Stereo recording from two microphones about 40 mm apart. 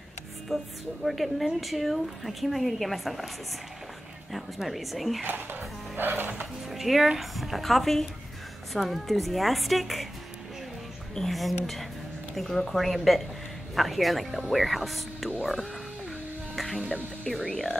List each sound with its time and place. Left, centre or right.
0.5 s speech: centre
4.6 s speech: centre
5.2 s speech: right
6.7 s speech: centre
11.1 s speech: centre
16.5 s music: centre
17.5 s speech: centre